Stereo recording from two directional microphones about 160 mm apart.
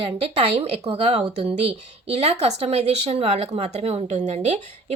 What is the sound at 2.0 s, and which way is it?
A woman's voice, 40° right (ahead or behind).